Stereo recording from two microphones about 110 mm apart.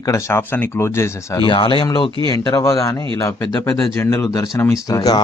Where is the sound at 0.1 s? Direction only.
25° left (ahead or behind).